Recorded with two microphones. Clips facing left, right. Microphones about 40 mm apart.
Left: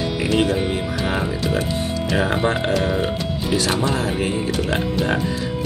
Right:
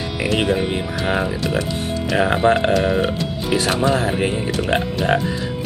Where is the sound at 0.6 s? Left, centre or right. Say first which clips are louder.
Right 1 dB; centre.